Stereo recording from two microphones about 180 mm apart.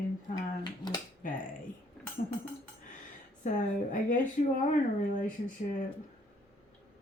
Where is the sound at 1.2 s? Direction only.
45° left (ahead or behind).